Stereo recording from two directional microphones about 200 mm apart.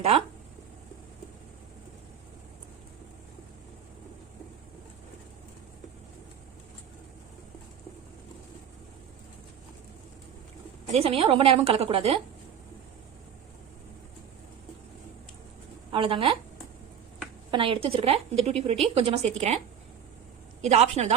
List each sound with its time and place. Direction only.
10.9 s a woman's voice: 30° right (ahead or behind)
15.9 s a woman's voice: 25° right (ahead or behind)
17.5 s a woman's voice: 25° right (ahead or behind)
20.6 s a woman's voice: 35° right (ahead or behind)